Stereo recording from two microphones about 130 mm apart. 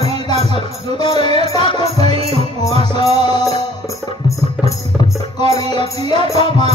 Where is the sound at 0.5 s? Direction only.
35° left (ahead or behind).